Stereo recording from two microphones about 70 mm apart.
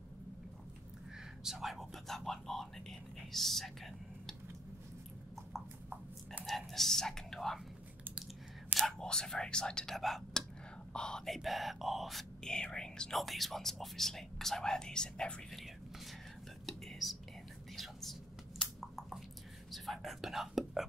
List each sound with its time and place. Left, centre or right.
1.4 s speech: centre
6.4 s speech: centre
8.7 s whispering: right
9.0 s speech: centre
15.5 s whispering: centre
18.6 s a sound: centre
19.7 s whispering: centre